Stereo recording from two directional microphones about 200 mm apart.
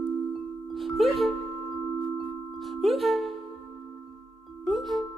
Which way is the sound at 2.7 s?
Centre (ahead or behind).